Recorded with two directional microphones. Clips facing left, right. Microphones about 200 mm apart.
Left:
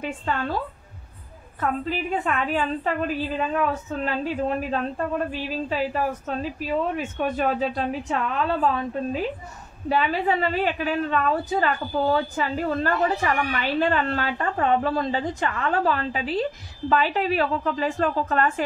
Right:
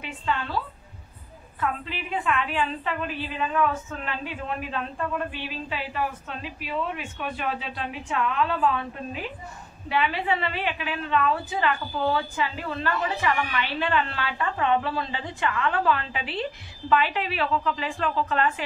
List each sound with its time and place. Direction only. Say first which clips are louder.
0.0 s a woman's voice: left 3 dB; 45° left (ahead or behind)
1.6 s a woman's voice: left 4 dB; 45° left (ahead or behind)